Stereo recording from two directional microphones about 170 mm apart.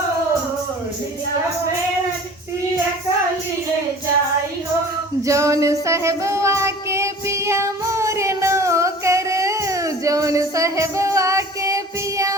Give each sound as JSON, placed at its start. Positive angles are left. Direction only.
{"t": 5.2, "sound": "music", "side_deg": -20}
{"t": 5.8, "sound": "child singing", "side_deg": -15}